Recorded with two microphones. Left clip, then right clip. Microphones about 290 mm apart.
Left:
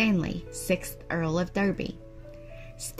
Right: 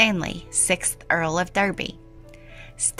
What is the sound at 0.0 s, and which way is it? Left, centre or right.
A woman's voice, right.